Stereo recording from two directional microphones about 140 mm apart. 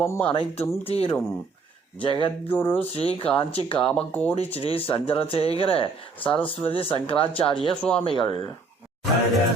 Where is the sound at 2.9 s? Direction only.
40° left (ahead or behind).